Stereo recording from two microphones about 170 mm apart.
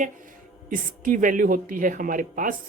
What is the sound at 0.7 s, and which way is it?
Speech, 50° right (ahead or behind).